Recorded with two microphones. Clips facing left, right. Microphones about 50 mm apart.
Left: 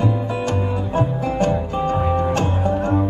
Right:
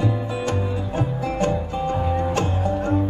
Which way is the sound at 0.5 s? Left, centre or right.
Left.